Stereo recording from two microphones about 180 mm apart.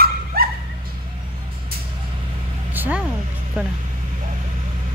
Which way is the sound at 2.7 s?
10° right (ahead or behind).